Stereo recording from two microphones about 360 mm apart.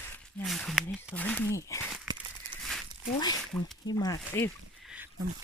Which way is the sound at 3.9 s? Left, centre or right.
Centre.